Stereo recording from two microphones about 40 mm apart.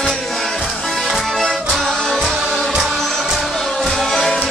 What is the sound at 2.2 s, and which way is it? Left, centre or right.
Music, centre.